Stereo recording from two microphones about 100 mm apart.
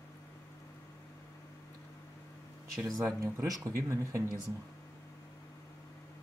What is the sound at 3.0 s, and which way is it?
Speech, 30° right (ahead or behind).